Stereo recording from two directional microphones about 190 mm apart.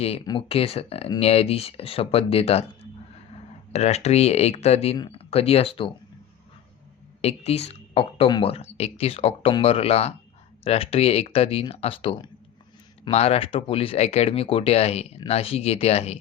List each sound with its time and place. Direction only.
0.3 s speech: 30° left (ahead or behind)
3.7 s speech: 35° left (ahead or behind)
7.2 s speech: 35° left (ahead or behind)